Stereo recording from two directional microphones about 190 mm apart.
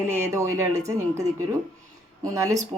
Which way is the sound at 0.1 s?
15° right (ahead or behind).